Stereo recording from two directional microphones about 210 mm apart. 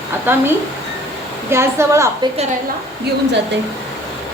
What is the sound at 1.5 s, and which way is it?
Speech, 10° right (ahead or behind).